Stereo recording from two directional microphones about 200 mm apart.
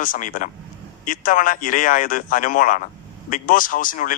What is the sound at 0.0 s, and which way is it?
A man's voice, 40° left (ahead or behind).